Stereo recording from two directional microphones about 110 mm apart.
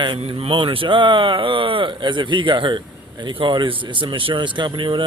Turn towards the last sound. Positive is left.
turn(degrees=-45)  # may be behind; listen again after turning